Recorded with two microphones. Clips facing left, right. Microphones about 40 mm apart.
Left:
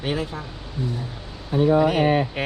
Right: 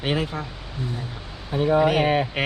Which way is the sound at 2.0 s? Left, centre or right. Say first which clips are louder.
Left 1 dB; right.